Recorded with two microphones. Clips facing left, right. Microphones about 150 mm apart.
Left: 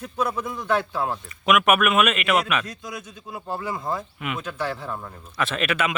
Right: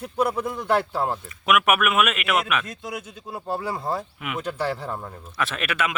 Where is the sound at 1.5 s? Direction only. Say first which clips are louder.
Left 2 dB; 5° right (ahead or behind).